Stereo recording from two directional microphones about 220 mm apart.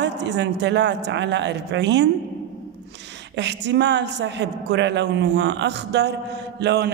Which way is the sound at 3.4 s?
55° right (ahead or behind).